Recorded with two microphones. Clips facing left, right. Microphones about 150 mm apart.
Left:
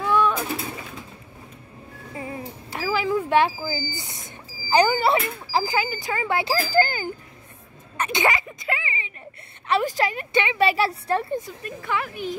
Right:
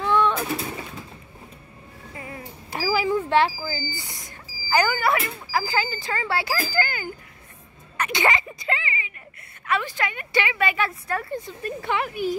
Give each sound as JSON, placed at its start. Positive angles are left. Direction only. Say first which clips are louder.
{"t": 0.0, "sound": "pigeon", "louder": "even", "side_deg": 10}
{"t": 2.1, "sound": "a sound", "louder": "left 5 dB", "side_deg": 20}
{"t": 2.7, "sound": "a sound", "louder": "right 1 dB", "side_deg": -5}
{"t": 3.2, "sound": "speech", "louder": "left 1 dB", "side_deg": 15}
{"t": 5.5, "sound": "speech", "louder": "left 2 dB", "side_deg": 20}
{"t": 6.5, "sound": "speech", "louder": "left 5 dB", "side_deg": 30}
{"t": 8.3, "sound": "speech", "louder": "even", "side_deg": 10}
{"t": 9.7, "sound": "a woman's voice", "louder": "left 4 dB", "side_deg": 40}
{"t": 10.3, "sound": "speech", "louder": "right 1 dB", "side_deg": 20}
{"t": 10.6, "sound": "a woman's voice", "louder": "left 4 dB", "side_deg": 35}
{"t": 11.6, "sound": "speech", "louder": "right 2 dB", "side_deg": -25}